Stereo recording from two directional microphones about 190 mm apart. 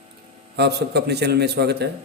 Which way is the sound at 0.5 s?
60° right (ahead or behind).